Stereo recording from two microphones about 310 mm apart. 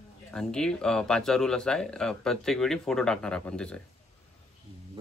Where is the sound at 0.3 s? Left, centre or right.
Centre.